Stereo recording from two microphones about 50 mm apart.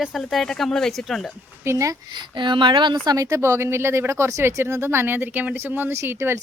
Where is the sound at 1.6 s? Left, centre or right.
Right.